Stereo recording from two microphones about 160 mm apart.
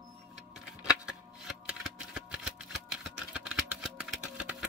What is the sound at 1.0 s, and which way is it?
Shuffling cards, 5° right (ahead or behind).